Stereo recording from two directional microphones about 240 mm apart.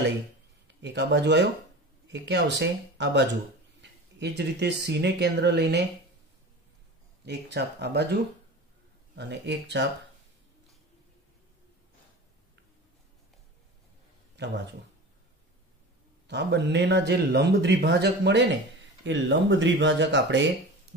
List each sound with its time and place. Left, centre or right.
0.8 s speech: right
7.2 s speech: right
14.3 s a sound: right
16.3 s speech: right